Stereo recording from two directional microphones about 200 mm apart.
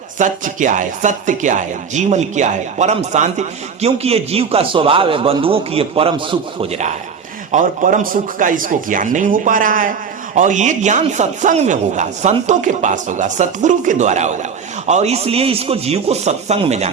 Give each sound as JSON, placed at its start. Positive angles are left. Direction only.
{"t": 0.2, "sound": "speech", "side_deg": -40}